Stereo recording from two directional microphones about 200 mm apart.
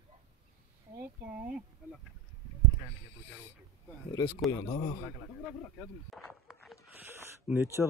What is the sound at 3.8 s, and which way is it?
Speech, 15° left (ahead or behind).